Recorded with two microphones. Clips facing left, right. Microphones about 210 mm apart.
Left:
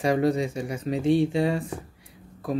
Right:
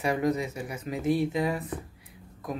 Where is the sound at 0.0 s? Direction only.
35° left (ahead or behind).